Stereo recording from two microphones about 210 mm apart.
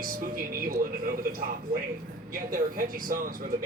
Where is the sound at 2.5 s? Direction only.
40° right (ahead or behind).